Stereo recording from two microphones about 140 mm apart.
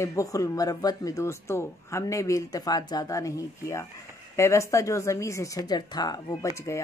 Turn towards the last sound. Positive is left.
turn(degrees=30)  # may be behind; listen again after turning